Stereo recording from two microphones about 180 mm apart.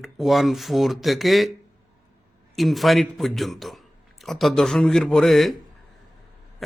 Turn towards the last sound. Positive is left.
turn(degrees=0)  # may be behind; listen again after turning